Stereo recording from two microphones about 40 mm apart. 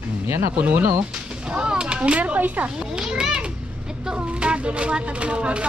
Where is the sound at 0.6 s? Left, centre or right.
Right.